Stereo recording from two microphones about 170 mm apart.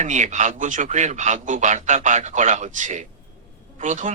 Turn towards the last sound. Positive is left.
turn(degrees=-45)  # may be behind; listen again after turning